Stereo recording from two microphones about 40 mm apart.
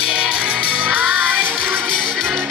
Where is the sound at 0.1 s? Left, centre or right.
Right.